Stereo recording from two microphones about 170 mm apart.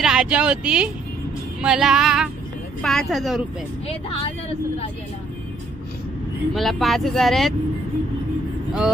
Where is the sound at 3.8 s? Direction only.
35° left (ahead or behind).